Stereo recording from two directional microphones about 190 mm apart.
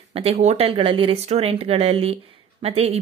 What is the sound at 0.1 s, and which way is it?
Speech, 30° right (ahead or behind).